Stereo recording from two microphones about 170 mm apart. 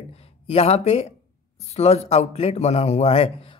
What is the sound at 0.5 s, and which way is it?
A man's voice, 35° left (ahead or behind).